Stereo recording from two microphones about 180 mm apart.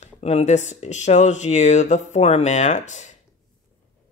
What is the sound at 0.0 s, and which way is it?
Speech, 35° left (ahead or behind).